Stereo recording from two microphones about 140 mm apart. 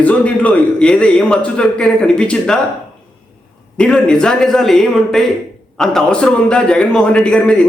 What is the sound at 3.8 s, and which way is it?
A man's voice, 5° left (ahead or behind).